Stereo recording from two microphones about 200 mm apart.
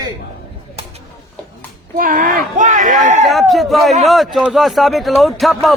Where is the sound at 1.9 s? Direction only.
45° right (ahead or behind).